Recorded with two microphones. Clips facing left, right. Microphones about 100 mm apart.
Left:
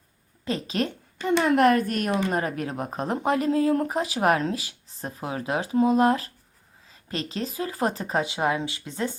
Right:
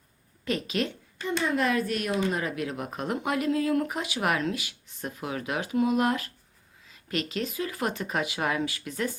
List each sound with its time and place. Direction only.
0.4 s speech: 30° left (ahead or behind)
1.3 s speech: 75° left (ahead or behind); by 9.1 s 25° left (ahead or behind)